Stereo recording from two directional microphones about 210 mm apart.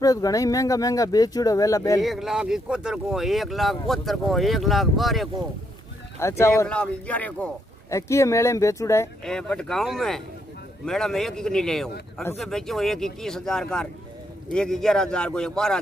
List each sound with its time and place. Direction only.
0.0 s speech: 15° left (ahead or behind)
2.0 s speech: centre (ahead or behind)
6.1 s speech: 15° left (ahead or behind)
9.2 s speech: 5° left (ahead or behind)